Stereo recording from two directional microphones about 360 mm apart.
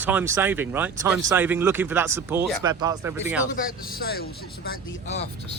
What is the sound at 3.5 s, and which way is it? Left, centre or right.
Speech, left.